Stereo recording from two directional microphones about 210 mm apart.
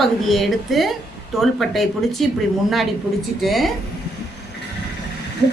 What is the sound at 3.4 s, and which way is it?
Speech, centre (ahead or behind).